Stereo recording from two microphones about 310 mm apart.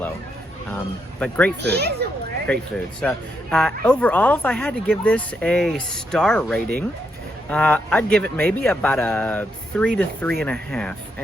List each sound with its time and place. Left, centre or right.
0.7 s speech: centre
1.6 s a child's voice: right
3.0 s speech: centre